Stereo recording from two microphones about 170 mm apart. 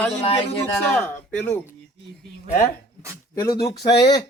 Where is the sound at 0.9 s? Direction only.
5° left (ahead or behind).